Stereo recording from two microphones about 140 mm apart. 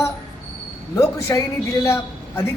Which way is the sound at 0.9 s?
20° left (ahead or behind).